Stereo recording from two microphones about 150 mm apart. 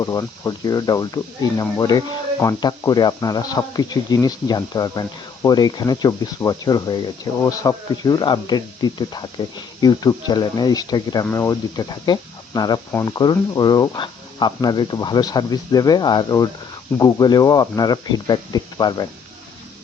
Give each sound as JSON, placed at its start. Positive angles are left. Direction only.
{"t": 0.0, "sound": "speech", "side_deg": 25}